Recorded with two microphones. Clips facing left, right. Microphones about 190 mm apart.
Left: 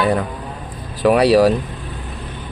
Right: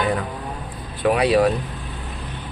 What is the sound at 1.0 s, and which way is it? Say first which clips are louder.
Speech: left 5 dB; 35° left (ahead or behind).